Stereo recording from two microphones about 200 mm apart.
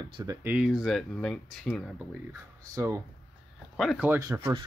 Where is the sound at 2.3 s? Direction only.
15° right (ahead or behind).